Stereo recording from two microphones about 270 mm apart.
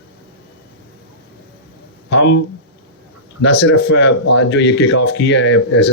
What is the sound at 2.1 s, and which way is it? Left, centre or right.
Speech, left.